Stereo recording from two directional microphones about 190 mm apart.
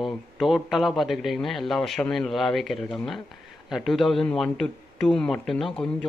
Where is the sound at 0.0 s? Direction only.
Centre (ahead or behind).